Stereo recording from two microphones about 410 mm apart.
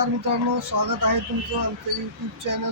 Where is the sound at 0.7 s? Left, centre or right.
Right.